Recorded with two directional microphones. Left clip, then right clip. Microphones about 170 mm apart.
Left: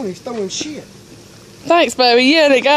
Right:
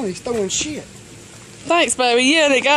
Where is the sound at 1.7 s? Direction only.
15° left (ahead or behind).